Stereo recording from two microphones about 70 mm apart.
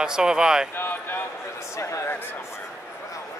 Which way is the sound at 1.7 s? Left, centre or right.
Left.